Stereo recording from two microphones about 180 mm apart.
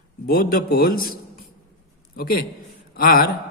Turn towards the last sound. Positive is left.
turn(degrees=55)  # may be behind; listen again after turning